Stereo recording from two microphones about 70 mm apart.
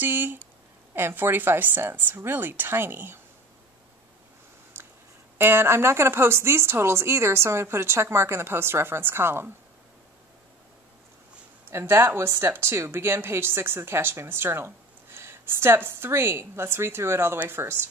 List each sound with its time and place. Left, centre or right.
0.0 s a sound: right
0.9 s a woman's voice: right
5.4 s a woman's voice: right
11.7 s a woman's voice: right